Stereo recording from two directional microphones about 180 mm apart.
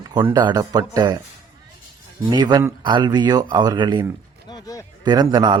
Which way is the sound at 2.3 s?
25° right (ahead or behind).